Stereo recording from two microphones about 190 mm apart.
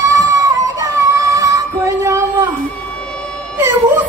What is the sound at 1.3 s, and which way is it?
Music, 15° right (ahead or behind).